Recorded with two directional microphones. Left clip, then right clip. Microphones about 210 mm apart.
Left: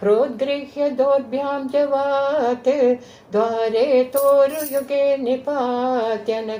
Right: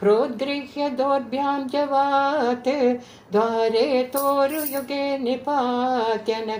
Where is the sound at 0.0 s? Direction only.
30° right (ahead or behind).